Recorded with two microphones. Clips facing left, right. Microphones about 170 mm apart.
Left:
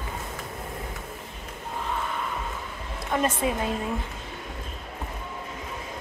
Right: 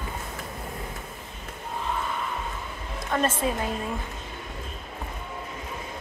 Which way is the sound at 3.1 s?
15° left (ahead or behind).